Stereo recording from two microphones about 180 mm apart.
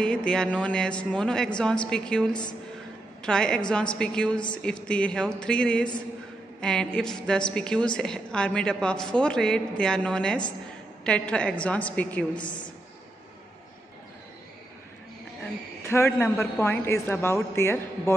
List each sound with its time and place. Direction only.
0.0 s a woman's voice: 5° left (ahead or behind)
3.3 s a woman's voice: 5° left (ahead or behind)
12.4 s a woman's voice: 25° left (ahead or behind)
15.9 s speech: 15° left (ahead or behind)